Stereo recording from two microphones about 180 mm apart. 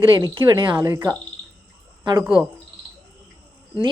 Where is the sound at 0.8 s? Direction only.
15° right (ahead or behind).